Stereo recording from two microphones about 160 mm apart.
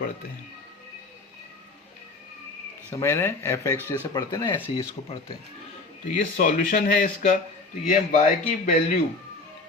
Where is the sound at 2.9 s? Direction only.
15° left (ahead or behind).